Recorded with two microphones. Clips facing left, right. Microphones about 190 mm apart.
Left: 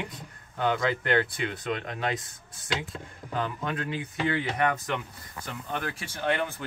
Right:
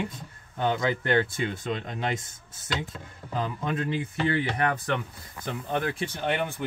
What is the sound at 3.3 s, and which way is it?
Speech, 25° right (ahead or behind).